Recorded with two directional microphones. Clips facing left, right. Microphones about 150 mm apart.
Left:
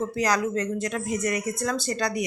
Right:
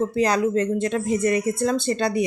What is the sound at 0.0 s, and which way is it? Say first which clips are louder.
Speech: right 4 dB; 25° right (ahead or behind).